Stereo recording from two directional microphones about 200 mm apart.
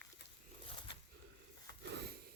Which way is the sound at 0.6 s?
25° left (ahead or behind).